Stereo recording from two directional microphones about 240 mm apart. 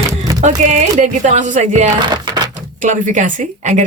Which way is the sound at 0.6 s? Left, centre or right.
Right.